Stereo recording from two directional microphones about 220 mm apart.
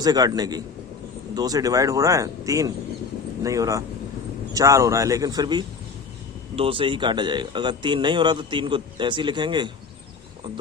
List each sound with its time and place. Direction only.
0.0 s a man's voice: 15° right (ahead or behind)